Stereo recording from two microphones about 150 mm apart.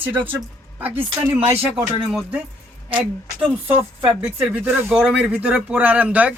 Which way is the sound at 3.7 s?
35° right (ahead or behind).